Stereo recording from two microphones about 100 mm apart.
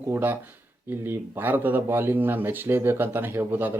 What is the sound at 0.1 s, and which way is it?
Speech, 20° right (ahead or behind).